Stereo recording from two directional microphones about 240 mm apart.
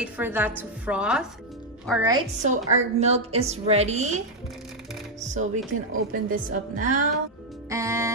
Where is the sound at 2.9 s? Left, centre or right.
Right.